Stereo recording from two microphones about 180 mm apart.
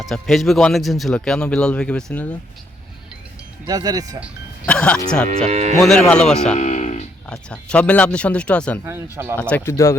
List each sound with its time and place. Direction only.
0.0 s speech: centre (ahead or behind)
3.7 s speech: 20° right (ahead or behind)
4.6 s speech: 5° left (ahead or behind)
5.5 s speech: 40° right (ahead or behind)
5.8 s speech: 5° left (ahead or behind)
6.6 s music: 40° left (ahead or behind)
7.3 s speech: 5° left (ahead or behind)
8.8 s speech: 15° right (ahead or behind)
9.4 s speech: 5° left (ahead or behind)